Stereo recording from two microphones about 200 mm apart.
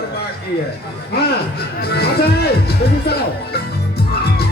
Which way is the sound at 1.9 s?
55° left (ahead or behind).